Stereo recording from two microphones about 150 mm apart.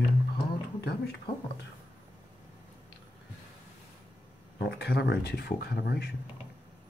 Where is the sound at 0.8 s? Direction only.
90° left.